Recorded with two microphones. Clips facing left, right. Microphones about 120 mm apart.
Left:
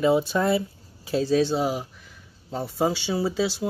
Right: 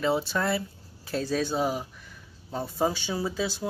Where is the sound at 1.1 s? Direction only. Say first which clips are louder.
Left 6 dB; 5° left (ahead or behind).